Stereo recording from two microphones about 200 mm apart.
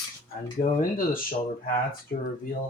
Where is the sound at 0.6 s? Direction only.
45° left (ahead or behind).